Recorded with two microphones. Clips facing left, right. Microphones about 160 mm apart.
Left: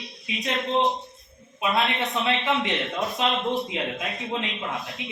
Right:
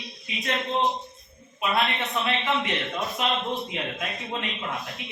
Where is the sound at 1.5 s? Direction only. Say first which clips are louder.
Left 1 dB; 20° left (ahead or behind).